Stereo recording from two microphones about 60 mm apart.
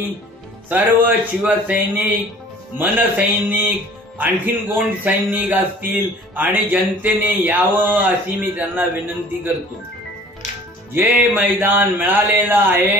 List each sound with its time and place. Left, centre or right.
0.7 s speech: right
10.9 s speech: right